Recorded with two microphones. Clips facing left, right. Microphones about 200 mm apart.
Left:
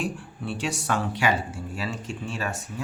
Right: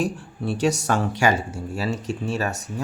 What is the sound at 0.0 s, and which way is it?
Speech, 40° right (ahead or behind).